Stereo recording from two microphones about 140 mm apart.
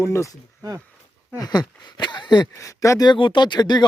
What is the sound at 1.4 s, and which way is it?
Speech, 30° left (ahead or behind).